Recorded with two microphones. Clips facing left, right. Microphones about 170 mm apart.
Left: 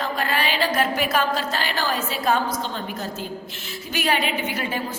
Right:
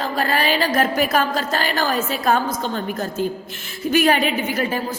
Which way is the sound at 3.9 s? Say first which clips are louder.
Right 7 dB; 50° right (ahead or behind).